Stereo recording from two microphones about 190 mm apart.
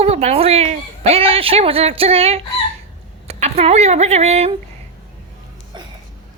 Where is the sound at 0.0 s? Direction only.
30° right (ahead or behind).